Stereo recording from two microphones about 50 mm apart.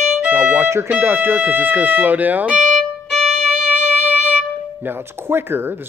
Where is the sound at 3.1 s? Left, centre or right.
Centre.